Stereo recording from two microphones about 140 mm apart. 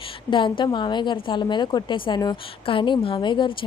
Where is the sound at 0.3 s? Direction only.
35° left (ahead or behind).